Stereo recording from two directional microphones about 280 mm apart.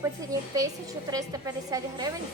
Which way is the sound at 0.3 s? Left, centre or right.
Centre.